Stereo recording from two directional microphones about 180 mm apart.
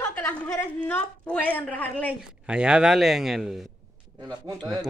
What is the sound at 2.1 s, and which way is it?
Speech, 5° right (ahead or behind).